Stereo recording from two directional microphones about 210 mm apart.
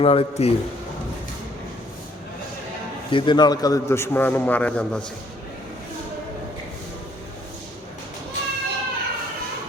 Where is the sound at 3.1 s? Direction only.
20° left (ahead or behind); by 5.0 s 5° left (ahead or behind).